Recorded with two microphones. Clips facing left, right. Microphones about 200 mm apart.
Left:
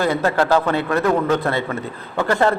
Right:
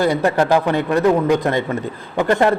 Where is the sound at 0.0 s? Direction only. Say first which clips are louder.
Right 2 dB; 15° right (ahead or behind).